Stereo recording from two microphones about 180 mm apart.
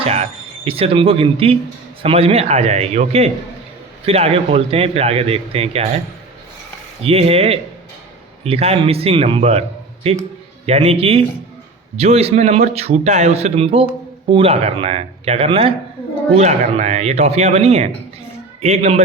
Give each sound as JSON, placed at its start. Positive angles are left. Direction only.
{"t": 0.0, "sound": "a man's voice", "side_deg": -35}
{"t": 7.0, "sound": "a man's voice", "side_deg": -35}